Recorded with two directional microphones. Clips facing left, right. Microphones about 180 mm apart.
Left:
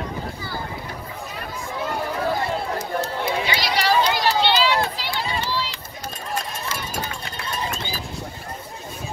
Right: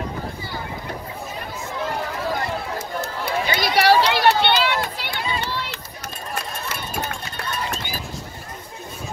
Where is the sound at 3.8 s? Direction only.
65° right (ahead or behind).